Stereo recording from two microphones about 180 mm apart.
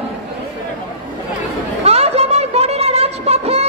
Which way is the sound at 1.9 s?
35° right (ahead or behind).